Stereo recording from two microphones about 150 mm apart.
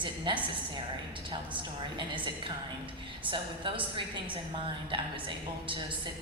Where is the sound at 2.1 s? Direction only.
35° right (ahead or behind).